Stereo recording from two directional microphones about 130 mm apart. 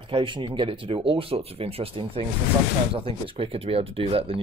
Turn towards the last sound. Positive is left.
turn(degrees=-45)  # may be behind; listen again after turning